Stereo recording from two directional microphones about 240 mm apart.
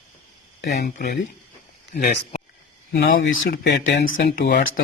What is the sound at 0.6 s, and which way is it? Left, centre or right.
Speech, left.